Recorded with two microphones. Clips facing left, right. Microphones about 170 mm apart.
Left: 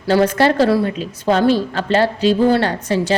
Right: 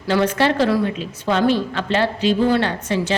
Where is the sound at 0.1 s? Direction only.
40° left (ahead or behind).